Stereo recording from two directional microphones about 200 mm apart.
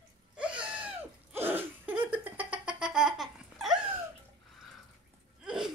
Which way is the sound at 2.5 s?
5° right (ahead or behind).